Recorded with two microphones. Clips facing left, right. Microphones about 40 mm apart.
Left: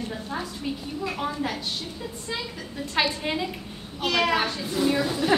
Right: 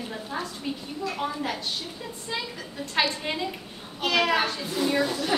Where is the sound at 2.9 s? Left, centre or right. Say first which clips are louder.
Left 1 dB; centre.